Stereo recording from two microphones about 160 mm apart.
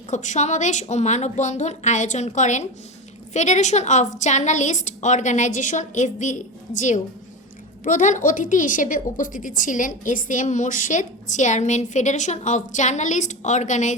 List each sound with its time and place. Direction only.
0.1 s a woman's voice: 50° left (ahead or behind)